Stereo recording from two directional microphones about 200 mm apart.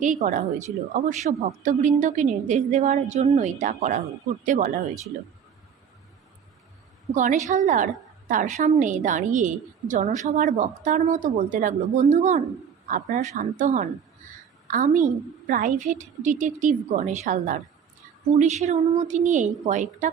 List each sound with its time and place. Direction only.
0.0 s a woman's voice: 40° right (ahead or behind)
7.1 s a woman's voice: 40° right (ahead or behind)